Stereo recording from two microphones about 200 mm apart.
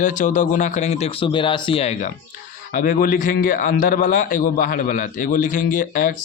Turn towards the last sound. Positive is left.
turn(degrees=40)  # may be behind; listen again after turning